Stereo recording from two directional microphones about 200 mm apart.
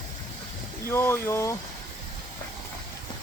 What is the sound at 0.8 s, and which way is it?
Speech, 15° left (ahead or behind).